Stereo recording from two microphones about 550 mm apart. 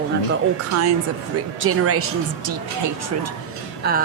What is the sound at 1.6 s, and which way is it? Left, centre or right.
A woman's voice, right.